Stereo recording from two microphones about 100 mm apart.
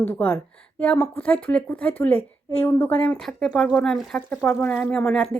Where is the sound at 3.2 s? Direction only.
5° left (ahead or behind).